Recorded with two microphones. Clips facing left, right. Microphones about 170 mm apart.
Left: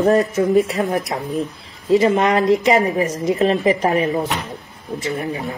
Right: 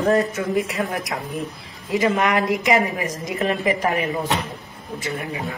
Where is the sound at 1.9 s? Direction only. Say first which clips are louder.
Left 5 dB; 30° left (ahead or behind).